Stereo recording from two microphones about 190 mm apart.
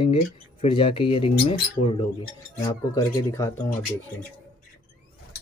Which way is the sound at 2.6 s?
15° left (ahead or behind).